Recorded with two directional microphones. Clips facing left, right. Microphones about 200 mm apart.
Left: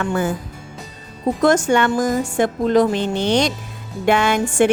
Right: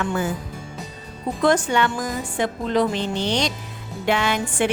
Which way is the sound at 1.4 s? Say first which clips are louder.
Left 3 dB; 45° left (ahead or behind).